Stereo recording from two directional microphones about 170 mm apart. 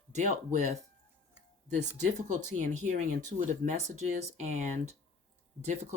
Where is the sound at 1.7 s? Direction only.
45° right (ahead or behind).